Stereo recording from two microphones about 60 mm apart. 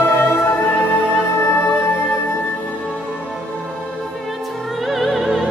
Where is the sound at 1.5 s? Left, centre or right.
Left.